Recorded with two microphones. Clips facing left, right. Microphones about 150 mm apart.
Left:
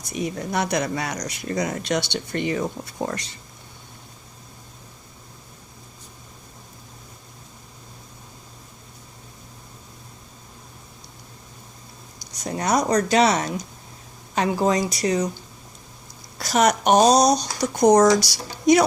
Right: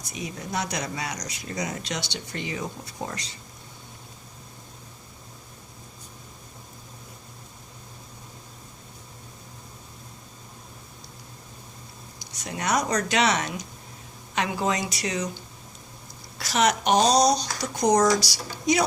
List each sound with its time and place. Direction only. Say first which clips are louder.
0.1 s speech: left 6 dB; 55° left (ahead or behind)
12.4 s speech: left 4 dB; 35° left (ahead or behind)
16.4 s speech: left 4 dB; 45° left (ahead or behind)